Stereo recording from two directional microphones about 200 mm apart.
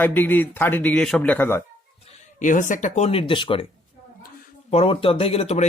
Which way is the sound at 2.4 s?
40° left (ahead or behind).